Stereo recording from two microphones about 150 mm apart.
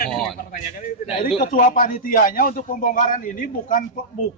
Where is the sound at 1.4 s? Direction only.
65° left (ahead or behind).